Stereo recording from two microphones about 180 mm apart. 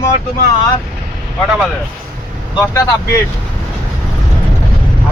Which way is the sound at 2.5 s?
20° left (ahead or behind).